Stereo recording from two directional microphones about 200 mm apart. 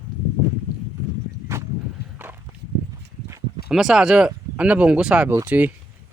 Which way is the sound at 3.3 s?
15° right (ahead or behind).